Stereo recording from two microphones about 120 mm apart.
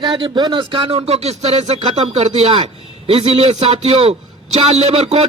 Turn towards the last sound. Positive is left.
turn(degrees=-60)  # may be behind; listen again after turning